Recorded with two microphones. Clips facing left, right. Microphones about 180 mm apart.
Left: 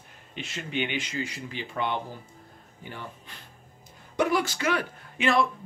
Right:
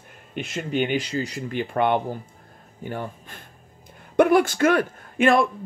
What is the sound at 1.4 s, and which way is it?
A man's voice, 55° right (ahead or behind).